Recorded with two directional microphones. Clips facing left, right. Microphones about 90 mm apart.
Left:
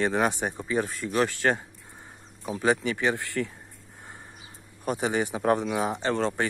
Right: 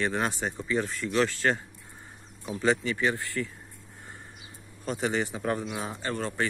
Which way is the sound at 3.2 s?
65° left (ahead or behind).